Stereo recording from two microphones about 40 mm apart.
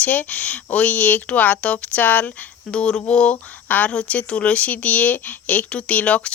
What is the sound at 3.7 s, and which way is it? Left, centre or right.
Speech, left.